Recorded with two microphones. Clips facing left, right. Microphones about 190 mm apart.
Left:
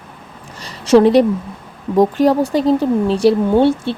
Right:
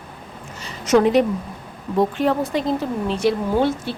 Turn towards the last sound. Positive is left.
turn(degrees=30)  # may be behind; listen again after turning